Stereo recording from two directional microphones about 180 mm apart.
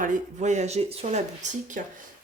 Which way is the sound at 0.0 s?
45° right (ahead or behind).